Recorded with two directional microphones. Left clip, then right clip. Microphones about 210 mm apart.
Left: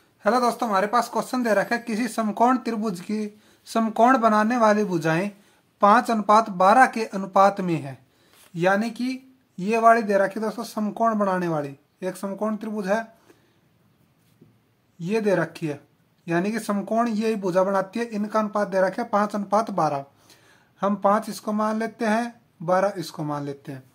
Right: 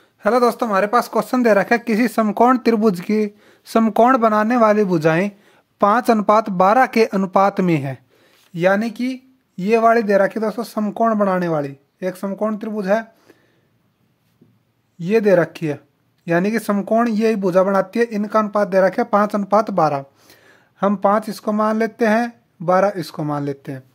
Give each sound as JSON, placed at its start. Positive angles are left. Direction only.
{"t": 0.2, "sound": "speech", "side_deg": -40}
{"t": 15.0, "sound": "speech", "side_deg": -40}